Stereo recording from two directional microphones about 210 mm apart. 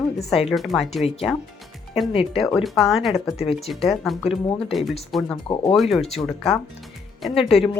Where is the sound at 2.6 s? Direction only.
Centre (ahead or behind).